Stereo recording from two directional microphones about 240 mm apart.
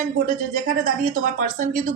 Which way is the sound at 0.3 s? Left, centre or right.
Right.